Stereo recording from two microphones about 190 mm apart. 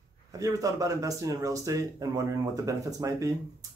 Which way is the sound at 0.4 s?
20° right (ahead or behind).